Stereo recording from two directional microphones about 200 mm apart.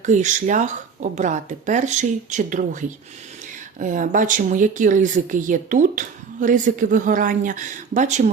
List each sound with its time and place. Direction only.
0.0 s speech: 40° right (ahead or behind)
3.8 s speech: 40° right (ahead or behind)